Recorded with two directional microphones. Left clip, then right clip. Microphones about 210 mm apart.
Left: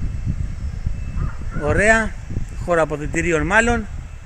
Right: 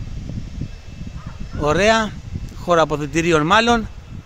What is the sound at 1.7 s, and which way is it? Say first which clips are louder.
A man's voice: even; 15° right (ahead or behind).